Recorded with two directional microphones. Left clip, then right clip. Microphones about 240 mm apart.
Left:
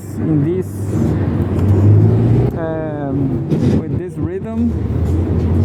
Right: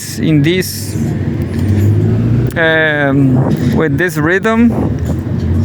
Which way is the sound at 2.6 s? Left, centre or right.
Right.